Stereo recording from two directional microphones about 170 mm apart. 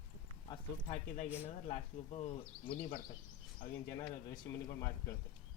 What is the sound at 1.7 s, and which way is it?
Speech, 40° left (ahead or behind).